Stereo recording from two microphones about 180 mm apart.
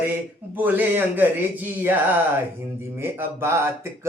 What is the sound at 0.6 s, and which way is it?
Speech, 10° right (ahead or behind).